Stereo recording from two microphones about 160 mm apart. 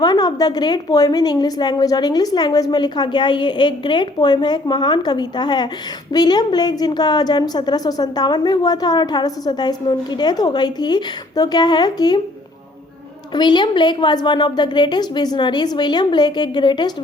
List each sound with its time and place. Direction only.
0.0 s a woman's voice: 25° left (ahead or behind)
13.3 s a woman's voice: 30° left (ahead or behind)